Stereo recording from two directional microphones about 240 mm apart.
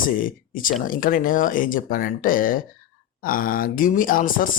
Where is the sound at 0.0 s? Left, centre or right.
Left.